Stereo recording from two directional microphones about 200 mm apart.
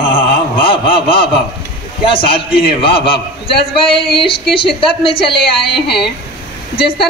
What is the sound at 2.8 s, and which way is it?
A man's voice, 25° left (ahead or behind).